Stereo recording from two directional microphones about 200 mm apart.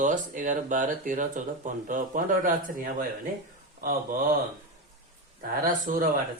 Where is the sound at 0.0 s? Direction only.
40° right (ahead or behind).